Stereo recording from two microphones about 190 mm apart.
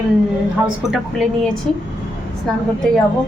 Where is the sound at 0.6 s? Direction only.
Centre (ahead or behind).